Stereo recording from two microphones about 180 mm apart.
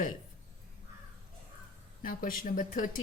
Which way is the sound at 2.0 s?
50° left (ahead or behind).